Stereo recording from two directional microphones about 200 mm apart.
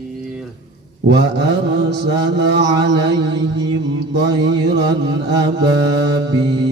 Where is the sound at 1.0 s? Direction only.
55° right (ahead or behind).